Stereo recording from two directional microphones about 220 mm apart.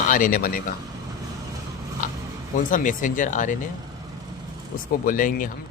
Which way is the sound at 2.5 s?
35° left (ahead or behind).